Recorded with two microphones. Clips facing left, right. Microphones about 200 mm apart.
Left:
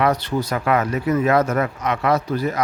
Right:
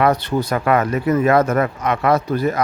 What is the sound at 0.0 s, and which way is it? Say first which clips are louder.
Speech: right 3 dB; 55° right (ahead or behind).